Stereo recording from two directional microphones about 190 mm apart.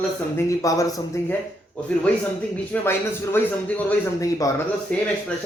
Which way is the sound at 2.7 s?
10° left (ahead or behind).